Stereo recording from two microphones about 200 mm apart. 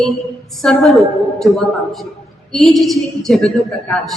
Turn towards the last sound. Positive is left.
turn(degrees=0)  # may be behind; listen again after turning